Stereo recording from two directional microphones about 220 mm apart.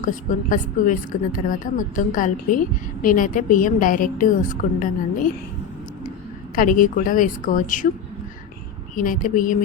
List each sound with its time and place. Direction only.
0.0 s speech: 35° left (ahead or behind)
6.6 s speech: 40° left (ahead or behind)
9.0 s speech: 35° left (ahead or behind)